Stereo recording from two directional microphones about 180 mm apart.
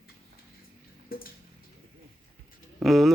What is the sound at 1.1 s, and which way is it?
Drip, 55° left (ahead or behind).